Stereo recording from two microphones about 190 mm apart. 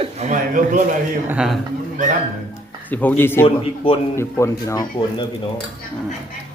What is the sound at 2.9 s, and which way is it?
Speech, 10° left (ahead or behind).